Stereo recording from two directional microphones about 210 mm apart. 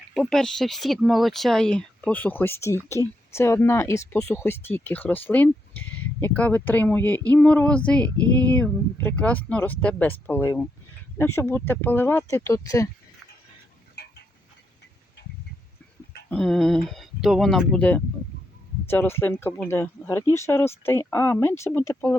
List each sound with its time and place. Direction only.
0.1 s speech: centre (ahead or behind)
14.0 s a sound: 50° left (ahead or behind)
16.3 s speech: 5° left (ahead or behind)